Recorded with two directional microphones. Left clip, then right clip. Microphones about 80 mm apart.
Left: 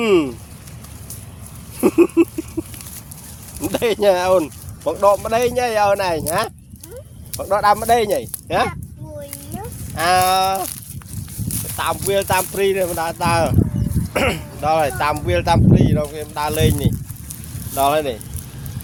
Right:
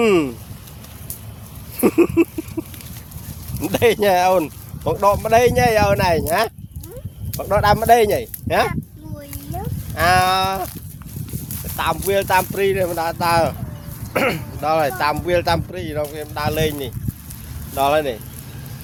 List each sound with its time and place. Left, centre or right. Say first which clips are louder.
0.0 s speech: even; right
1.8 s speech: left 1 dB; right
2.6 s a sound: left 1 dB; right
3.7 s speech: right 1 dB; right
9.9 s speech: even; right
11.8 s speech: even; right